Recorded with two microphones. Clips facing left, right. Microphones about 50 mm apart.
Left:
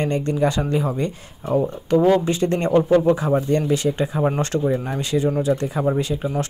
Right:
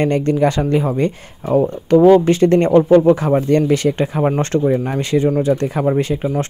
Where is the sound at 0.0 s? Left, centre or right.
Right.